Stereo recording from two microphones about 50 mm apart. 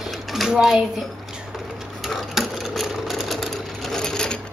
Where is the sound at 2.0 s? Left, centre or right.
Centre.